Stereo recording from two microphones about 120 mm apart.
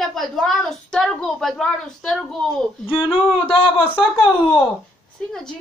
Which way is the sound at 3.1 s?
45° left (ahead or behind).